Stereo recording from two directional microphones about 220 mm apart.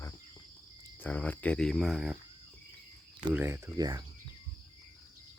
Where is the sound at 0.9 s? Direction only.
5° left (ahead or behind).